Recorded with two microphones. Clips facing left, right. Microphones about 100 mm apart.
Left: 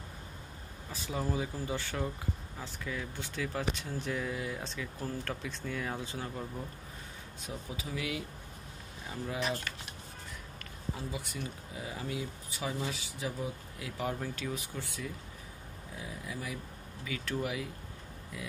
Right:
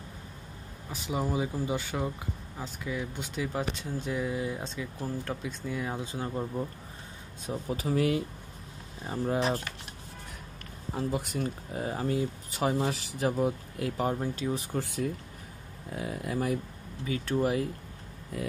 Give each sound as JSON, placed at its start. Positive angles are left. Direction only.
{"t": 0.8, "sound": "speech", "side_deg": -15}
{"t": 7.6, "sound": "speech", "side_deg": -45}
{"t": 11.0, "sound": "speech", "side_deg": -50}
{"t": 14.2, "sound": "speech", "side_deg": -25}
{"t": 14.7, "sound": "speech", "side_deg": -50}
{"t": 15.9, "sound": "speech", "side_deg": -65}
{"t": 17.0, "sound": "speech", "side_deg": -35}